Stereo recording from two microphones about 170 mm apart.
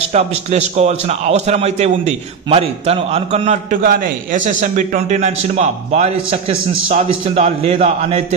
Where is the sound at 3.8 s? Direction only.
60° right (ahead or behind).